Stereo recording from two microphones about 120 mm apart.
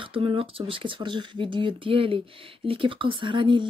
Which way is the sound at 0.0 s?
50° right (ahead or behind).